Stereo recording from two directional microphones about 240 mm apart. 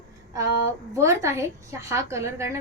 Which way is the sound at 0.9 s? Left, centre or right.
Centre.